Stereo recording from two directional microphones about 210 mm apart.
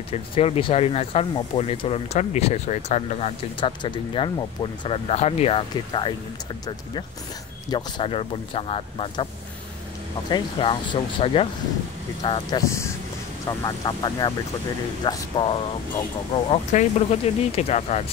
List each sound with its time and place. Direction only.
0.1 s speech: 30° left (ahead or behind)
7.7 s speech: 25° left (ahead or behind)
10.3 s speech: 25° left (ahead or behind)